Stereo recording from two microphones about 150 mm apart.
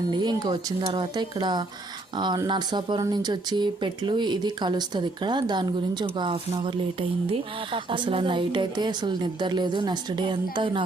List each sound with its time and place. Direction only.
0.1 s speech: 30° right (ahead or behind)